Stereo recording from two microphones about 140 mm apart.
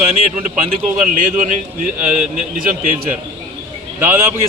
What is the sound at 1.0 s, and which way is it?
Speech, 65° right (ahead or behind).